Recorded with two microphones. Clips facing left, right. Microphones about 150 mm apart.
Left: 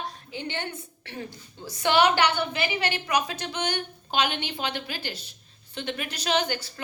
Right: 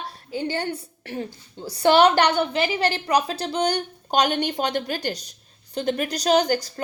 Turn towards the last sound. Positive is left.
turn(degrees=-40)  # may be behind; listen again after turning